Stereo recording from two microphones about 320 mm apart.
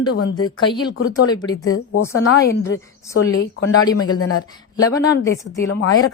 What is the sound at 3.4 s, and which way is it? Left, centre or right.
Speech, left.